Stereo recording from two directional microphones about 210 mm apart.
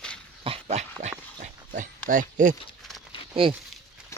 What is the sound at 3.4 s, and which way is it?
Speech, 25° right (ahead or behind).